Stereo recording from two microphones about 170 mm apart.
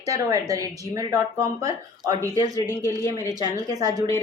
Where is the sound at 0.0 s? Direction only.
20° right (ahead or behind).